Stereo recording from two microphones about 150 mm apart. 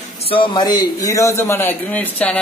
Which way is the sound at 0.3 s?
30° left (ahead or behind).